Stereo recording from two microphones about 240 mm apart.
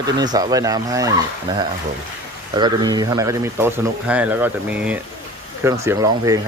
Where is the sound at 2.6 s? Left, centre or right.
Centre.